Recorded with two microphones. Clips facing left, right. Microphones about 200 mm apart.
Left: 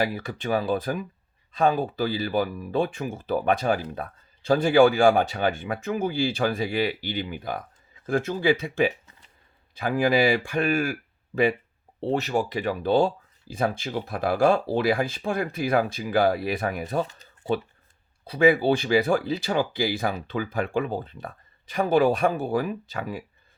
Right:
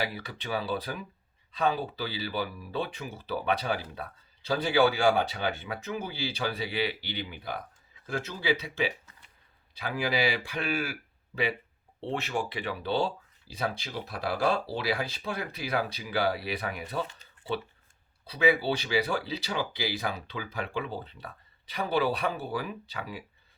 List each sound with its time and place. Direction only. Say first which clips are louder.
0.0 s speech: left 7 dB; 45° left (ahead or behind)
11.9 s speech: left 7 dB; 40° left (ahead or behind)